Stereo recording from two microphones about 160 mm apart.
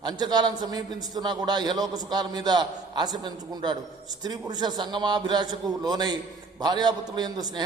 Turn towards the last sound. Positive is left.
turn(degrees=-25)  # may be behind; listen again after turning